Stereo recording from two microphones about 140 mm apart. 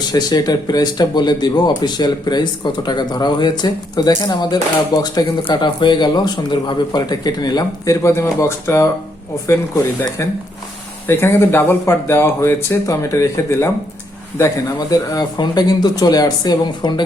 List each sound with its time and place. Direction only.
0.1 s speech: 30° left (ahead or behind)
11.0 s speech: 15° left (ahead or behind)